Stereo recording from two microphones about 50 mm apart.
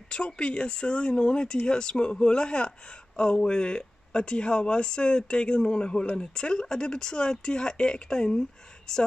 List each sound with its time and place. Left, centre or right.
0.4 s speech: centre